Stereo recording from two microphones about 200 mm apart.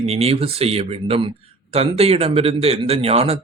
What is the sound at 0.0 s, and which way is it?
Speech, 30° right (ahead or behind).